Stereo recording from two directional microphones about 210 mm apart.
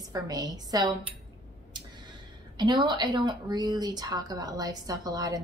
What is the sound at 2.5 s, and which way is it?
Speech, 20° right (ahead or behind).